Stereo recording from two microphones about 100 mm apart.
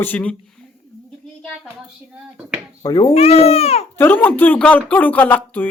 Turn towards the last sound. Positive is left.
turn(degrees=20)  # may be behind; listen again after turning